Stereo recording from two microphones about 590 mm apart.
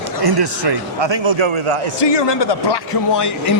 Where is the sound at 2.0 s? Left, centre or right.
Left.